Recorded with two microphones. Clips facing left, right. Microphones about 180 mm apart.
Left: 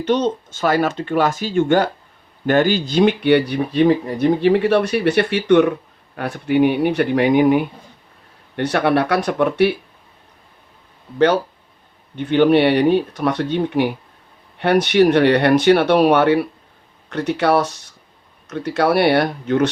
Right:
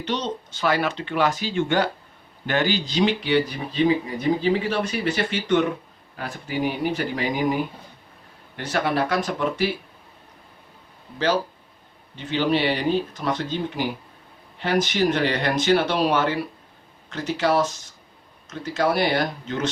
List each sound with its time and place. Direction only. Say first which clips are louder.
0.0 s speech: left 9 dB; 50° left (ahead or behind); by 9.7 s 65° left (ahead or behind)
12.1 s speech: left 9 dB; 60° left (ahead or behind)